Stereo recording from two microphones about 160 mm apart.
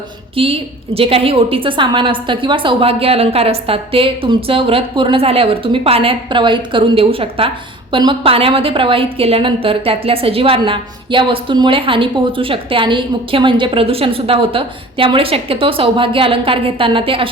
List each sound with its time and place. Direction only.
0.3 s a woman's voice: 35° right (ahead or behind)